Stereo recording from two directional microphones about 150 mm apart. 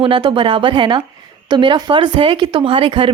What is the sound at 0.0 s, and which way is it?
Speech, 35° right (ahead or behind).